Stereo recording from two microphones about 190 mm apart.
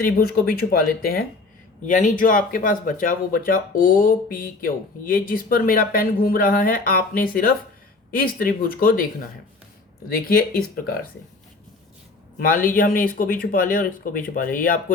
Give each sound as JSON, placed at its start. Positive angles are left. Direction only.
{"t": 0.0, "sound": "speech", "side_deg": 50}
{"t": 10.1, "sound": "speech", "side_deg": 50}
{"t": 12.4, "sound": "speech", "side_deg": 45}